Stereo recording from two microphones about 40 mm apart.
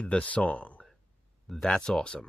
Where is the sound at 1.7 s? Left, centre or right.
Centre.